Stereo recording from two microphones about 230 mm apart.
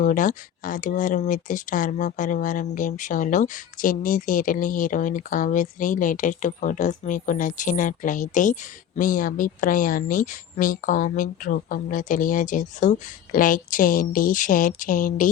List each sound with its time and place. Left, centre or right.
0.0 s speech: left